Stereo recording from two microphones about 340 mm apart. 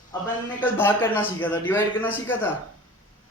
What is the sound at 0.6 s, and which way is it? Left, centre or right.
A man's voice, centre.